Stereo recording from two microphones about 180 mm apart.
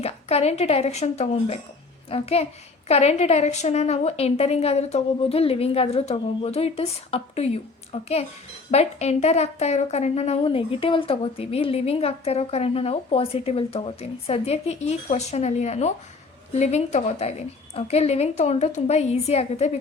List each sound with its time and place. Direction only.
0.0 s a woman's voice: 35° left (ahead or behind)